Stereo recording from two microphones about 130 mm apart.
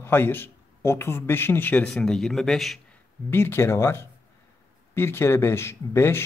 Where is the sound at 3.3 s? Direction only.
20° left (ahead or behind).